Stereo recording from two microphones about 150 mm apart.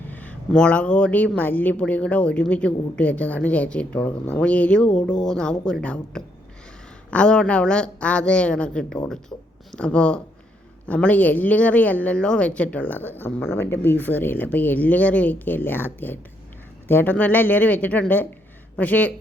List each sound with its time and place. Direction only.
0.1 s speech: 10° left (ahead or behind)
9.3 s speech: 20° left (ahead or behind)
9.7 s speech: 5° left (ahead or behind)